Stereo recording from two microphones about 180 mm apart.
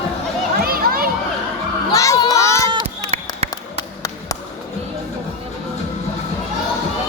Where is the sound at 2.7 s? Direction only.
35° right (ahead or behind).